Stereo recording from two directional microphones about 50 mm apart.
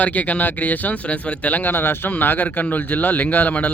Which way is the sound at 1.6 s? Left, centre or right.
Left.